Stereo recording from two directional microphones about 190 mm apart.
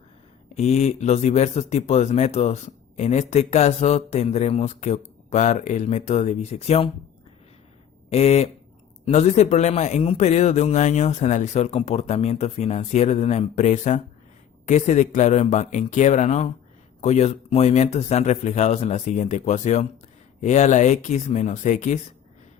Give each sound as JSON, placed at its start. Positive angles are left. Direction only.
{"t": 0.5, "sound": "speech", "side_deg": 35}
{"t": 8.1, "sound": "speech", "side_deg": 35}